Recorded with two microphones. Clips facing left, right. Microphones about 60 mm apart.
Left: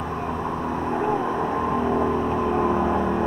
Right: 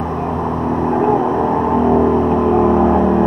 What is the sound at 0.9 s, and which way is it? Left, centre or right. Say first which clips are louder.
Vehicle: right 9 dB; right.